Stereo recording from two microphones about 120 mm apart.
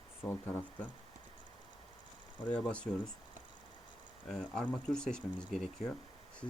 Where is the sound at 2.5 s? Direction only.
10° left (ahead or behind).